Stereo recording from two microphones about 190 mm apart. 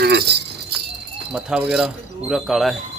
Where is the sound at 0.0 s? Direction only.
60° right (ahead or behind).